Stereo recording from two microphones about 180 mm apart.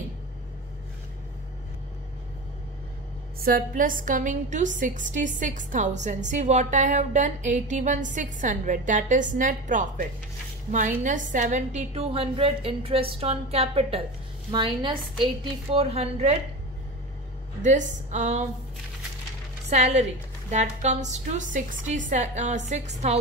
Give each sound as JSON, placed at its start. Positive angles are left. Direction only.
{"t": 3.3, "sound": "a woman's voice", "side_deg": -50}
{"t": 17.6, "sound": "a woman's voice", "side_deg": -45}
{"t": 19.7, "sound": "a woman's voice", "side_deg": -40}